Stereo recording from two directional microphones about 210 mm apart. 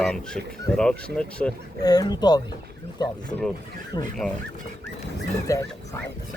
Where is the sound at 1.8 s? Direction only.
20° left (ahead or behind).